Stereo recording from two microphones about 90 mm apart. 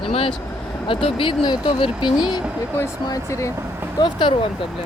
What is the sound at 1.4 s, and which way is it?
Speech, 55° left (ahead or behind).